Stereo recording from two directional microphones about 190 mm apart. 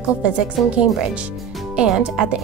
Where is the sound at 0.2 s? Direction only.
5° right (ahead or behind).